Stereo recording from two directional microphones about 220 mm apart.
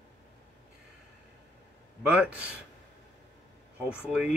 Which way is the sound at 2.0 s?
5° right (ahead or behind).